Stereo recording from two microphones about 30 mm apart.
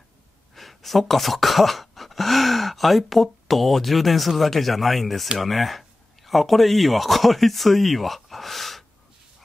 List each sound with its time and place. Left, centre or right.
0.6 s speech: centre